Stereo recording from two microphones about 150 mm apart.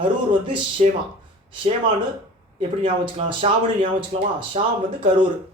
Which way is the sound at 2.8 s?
40° right (ahead or behind).